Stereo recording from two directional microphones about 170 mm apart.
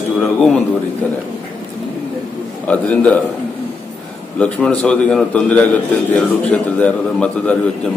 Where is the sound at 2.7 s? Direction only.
10° left (ahead or behind).